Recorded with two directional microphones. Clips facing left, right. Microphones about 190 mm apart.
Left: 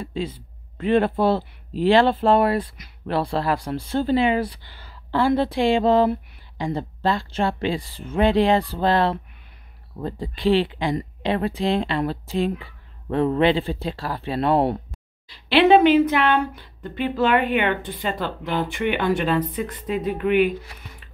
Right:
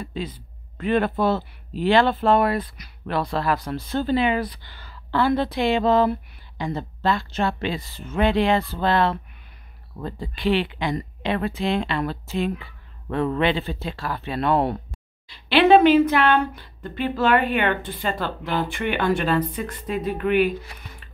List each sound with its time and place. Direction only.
0.0 s a man's voice: 30° left (ahead or behind)
15.8 s speech: 20° left (ahead or behind)